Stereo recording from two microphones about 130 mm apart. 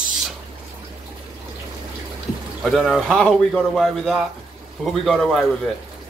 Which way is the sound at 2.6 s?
Centre (ahead or behind).